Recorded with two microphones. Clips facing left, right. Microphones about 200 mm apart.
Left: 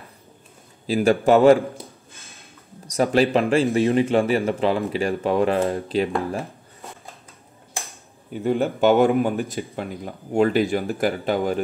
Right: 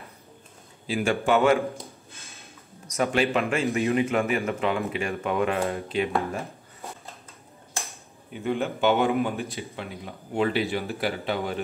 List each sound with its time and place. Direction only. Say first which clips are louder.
0.8 s speech: left 7 dB; 40° left (ahead or behind)
2.9 s speech: left 5 dB; 35° left (ahead or behind)
8.3 s speech: left 5 dB; 40° left (ahead or behind)